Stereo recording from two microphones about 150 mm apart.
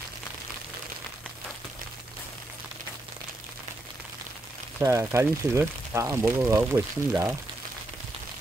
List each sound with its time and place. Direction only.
4.7 s speech: 20° right (ahead or behind)